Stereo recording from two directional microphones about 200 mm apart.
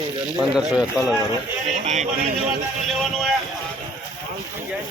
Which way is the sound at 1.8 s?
35° right (ahead or behind).